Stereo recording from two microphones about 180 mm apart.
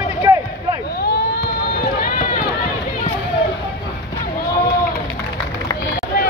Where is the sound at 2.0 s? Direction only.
45° left (ahead or behind).